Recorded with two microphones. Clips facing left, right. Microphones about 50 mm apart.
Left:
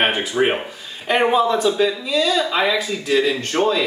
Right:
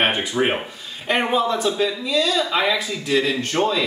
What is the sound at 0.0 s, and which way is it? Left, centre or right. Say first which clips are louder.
A man's voice: left 2 dB; centre.